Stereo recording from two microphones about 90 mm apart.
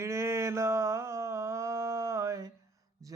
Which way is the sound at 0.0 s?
30° right (ahead or behind).